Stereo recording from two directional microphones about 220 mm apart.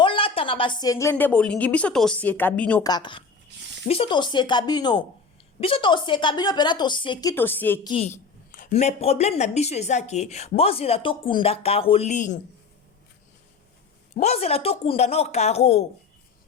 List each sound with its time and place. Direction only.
0.0 s a woman's voice: 25° left (ahead or behind); by 2.8 s 5° left (ahead or behind)
2.8 s a woman's voice: 20° left (ahead or behind)
7.9 s a woman's voice: 25° left (ahead or behind)
14.1 s a woman's voice: 30° left (ahead or behind)